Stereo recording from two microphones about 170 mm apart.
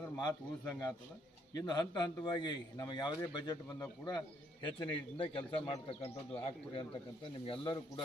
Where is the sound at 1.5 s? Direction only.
25° left (ahead or behind).